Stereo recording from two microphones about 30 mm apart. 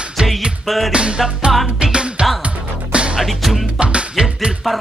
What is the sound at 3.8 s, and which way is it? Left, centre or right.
Music, right.